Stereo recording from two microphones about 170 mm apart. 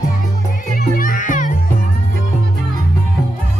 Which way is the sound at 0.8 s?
55° left (ahead or behind).